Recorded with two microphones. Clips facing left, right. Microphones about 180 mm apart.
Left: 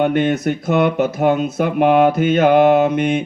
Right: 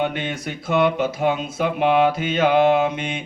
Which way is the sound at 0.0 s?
50° left (ahead or behind).